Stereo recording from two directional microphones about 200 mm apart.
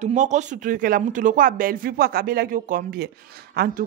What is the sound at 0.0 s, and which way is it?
A woman's voice, 35° right (ahead or behind).